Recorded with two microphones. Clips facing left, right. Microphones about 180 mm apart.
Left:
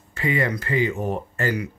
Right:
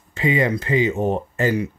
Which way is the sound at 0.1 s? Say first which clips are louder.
Right 4 dB; 20° right (ahead or behind).